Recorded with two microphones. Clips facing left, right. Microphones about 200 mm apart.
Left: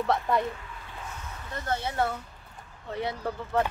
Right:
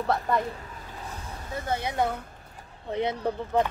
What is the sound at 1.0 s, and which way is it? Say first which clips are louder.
Vehicle: right 2 dB; 35° right (ahead or behind).